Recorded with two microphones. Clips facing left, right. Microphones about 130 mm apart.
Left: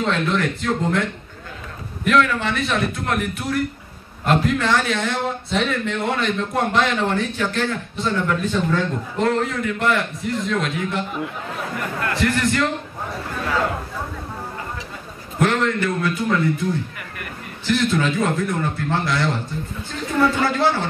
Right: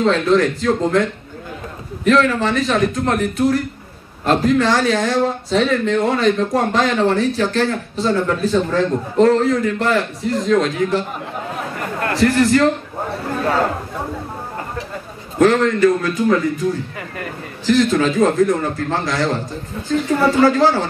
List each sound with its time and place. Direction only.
0.1 s speech: 35° right (ahead or behind)
2.0 s speech: 35° right (ahead or behind)
13.3 s chatter: 40° right (ahead or behind)
15.4 s speech: 40° right (ahead or behind)
17.6 s speech: 40° right (ahead or behind)